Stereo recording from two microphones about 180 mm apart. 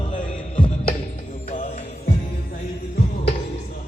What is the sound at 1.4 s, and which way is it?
Music, 35° left (ahead or behind).